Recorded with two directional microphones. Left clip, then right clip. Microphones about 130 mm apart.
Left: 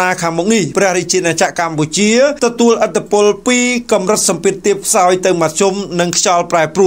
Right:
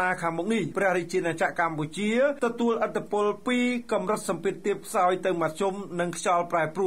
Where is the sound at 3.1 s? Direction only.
30° left (ahead or behind).